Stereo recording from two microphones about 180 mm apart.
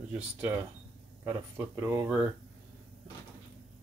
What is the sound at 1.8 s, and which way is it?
Speech, 15° right (ahead or behind).